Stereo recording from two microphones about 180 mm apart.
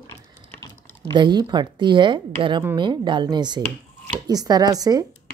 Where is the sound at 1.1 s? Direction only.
25° right (ahead or behind).